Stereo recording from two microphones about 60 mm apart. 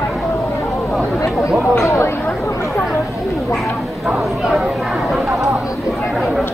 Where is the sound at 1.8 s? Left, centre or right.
Left.